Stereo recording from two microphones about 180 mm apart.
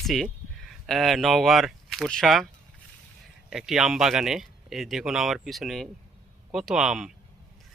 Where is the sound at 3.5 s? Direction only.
Centre (ahead or behind).